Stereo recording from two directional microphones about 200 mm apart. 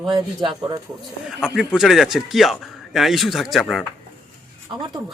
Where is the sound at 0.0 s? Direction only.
20° right (ahead or behind).